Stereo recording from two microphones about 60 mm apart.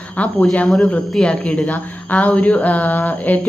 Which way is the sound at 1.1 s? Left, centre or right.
Centre.